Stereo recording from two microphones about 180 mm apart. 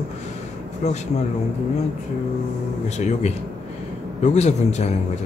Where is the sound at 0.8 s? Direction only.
40° left (ahead or behind).